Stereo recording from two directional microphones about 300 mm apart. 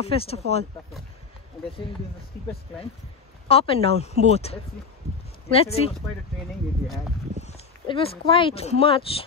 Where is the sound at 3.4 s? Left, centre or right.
Centre.